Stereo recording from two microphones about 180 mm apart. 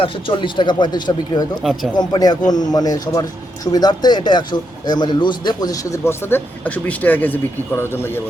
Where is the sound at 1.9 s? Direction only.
25° left (ahead or behind).